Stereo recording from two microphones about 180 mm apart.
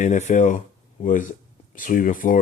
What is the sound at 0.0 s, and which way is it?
Speech, 45° left (ahead or behind).